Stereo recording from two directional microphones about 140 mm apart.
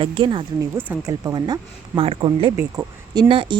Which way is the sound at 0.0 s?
35° right (ahead or behind).